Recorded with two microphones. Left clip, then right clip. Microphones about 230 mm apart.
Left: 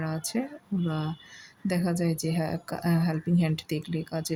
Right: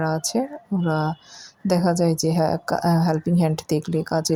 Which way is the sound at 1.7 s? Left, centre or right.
Centre.